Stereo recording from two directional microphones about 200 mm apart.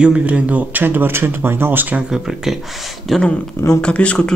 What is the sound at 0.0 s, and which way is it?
Speech, 5° right (ahead or behind).